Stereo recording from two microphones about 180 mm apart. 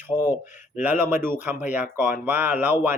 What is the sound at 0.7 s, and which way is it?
Speech, 10° right (ahead or behind).